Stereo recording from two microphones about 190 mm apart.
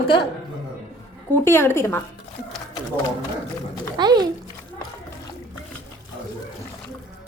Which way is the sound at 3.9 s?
25° right (ahead or behind).